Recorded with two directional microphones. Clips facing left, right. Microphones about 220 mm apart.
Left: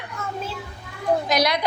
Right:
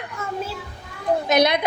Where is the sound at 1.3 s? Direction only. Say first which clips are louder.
Right 7 dB; 25° right (ahead or behind).